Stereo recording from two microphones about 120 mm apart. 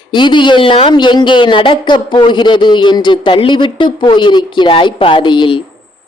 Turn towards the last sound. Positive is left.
turn(degrees=45)  # may be behind; listen again after turning